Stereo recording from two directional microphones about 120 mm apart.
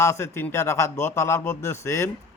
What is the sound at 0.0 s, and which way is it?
Speech, 20° left (ahead or behind).